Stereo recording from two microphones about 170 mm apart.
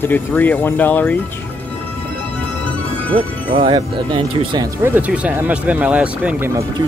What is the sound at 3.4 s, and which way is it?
Speech, 30° right (ahead or behind).